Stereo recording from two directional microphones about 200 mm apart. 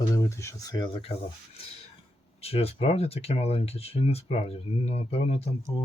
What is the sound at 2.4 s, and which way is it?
Speech, 30° left (ahead or behind).